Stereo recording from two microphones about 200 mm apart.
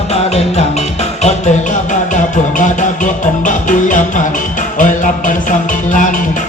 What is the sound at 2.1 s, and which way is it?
Music, 40° left (ahead or behind).